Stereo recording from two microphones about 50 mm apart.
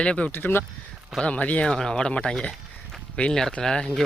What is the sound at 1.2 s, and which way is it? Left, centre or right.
Speech, left.